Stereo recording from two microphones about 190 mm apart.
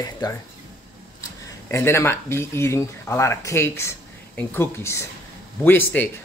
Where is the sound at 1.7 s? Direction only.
15° left (ahead or behind).